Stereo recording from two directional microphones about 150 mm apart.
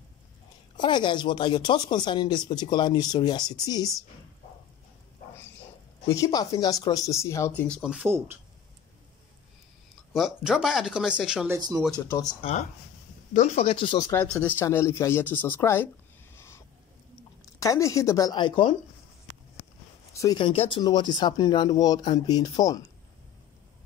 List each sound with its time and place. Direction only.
0.7 s speech: 30° left (ahead or behind)
6.0 s speech: 20° left (ahead or behind)
7.8 s speech: 5° right (ahead or behind)
10.1 s speech: centre (ahead or behind)
11.5 s speech: 20° right (ahead or behind)
12.4 s speech: 45° left (ahead or behind)
13.3 s speech: 55° left (ahead or behind)
13.7 s speech: 35° left (ahead or behind)
14.2 s speech: 10° left (ahead or behind)
16.3 s a sound: 15° left (ahead or behind)
17.6 s speech: 20° left (ahead or behind)
20.2 s speech: 30° left (ahead or behind)